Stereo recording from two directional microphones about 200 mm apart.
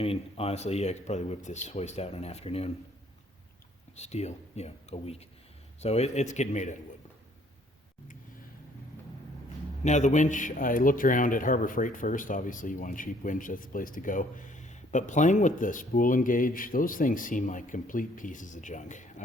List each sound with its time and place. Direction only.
0.0 s a man's voice: 30° left (ahead or behind)
3.9 s a man's voice: 35° left (ahead or behind)
9.8 s a man's voice: 35° left (ahead or behind)